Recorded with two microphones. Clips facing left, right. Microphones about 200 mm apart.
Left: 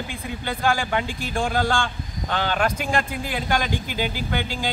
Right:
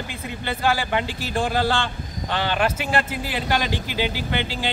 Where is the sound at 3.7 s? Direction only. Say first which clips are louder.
Right 1 dB; 50° left (ahead or behind).